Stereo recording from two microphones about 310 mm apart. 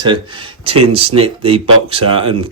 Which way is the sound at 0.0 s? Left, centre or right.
Centre.